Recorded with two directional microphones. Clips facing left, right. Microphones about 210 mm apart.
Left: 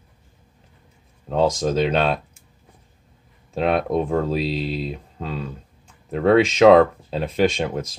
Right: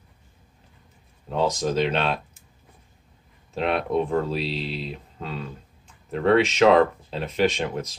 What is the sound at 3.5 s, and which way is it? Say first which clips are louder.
Speech: left 3 dB; 40° left (ahead or behind).